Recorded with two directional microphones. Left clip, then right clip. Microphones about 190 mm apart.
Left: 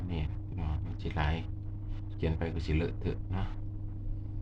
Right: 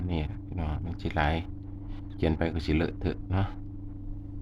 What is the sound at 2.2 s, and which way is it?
Speech, 55° right (ahead or behind).